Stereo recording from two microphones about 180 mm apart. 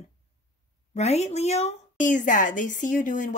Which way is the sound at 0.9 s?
40° left (ahead or behind).